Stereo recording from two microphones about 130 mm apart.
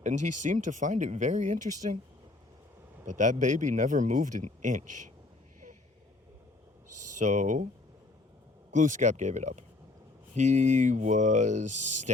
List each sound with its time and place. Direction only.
0.0 s speech: 70° right (ahead or behind)
3.1 s speech: 75° right (ahead or behind)
7.2 s speech: 70° right (ahead or behind)
8.7 s speech: 70° right (ahead or behind)